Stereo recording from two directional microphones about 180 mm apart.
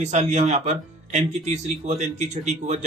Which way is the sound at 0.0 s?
40° right (ahead or behind).